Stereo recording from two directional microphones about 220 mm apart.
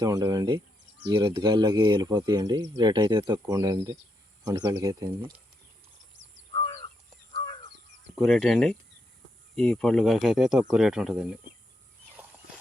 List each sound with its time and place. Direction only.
0.0 s speech: 15° right (ahead or behind)
6.2 s crow: 55° right (ahead or behind)
6.5 s crow: 25° left (ahead or behind)
8.1 s speech: 5° left (ahead or behind)